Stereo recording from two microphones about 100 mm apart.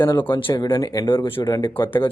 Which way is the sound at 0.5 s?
40° left (ahead or behind).